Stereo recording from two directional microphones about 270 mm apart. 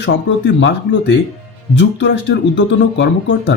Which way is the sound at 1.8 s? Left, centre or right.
Left.